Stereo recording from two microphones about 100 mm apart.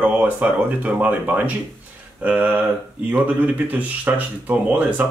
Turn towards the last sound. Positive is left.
turn(degrees=-15)  # may be behind; listen again after turning